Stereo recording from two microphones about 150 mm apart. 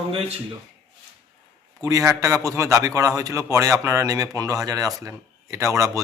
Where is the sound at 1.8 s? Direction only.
20° right (ahead or behind).